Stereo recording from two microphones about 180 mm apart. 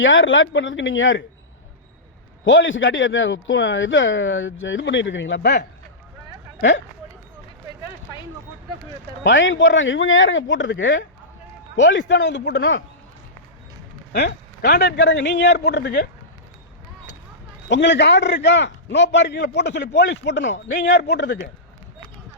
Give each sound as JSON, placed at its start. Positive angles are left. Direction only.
{"t": 0.0, "sound": "speech", "side_deg": 90}
{"t": 2.4, "sound": "speech", "side_deg": 90}
{"t": 6.6, "sound": "speech", "side_deg": 90}
{"t": 9.2, "sound": "a man's voice", "side_deg": 90}
{"t": 14.1, "sound": "a man's voice", "side_deg": 70}
{"t": 17.7, "sound": "a man's voice", "side_deg": 80}
{"t": 20.8, "sound": "a man's voice", "side_deg": 75}